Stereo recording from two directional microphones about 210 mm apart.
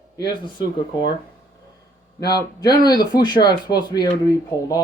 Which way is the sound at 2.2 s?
20° left (ahead or behind).